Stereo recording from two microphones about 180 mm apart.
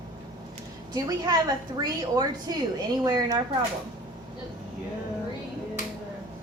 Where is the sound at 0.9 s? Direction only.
20° right (ahead or behind).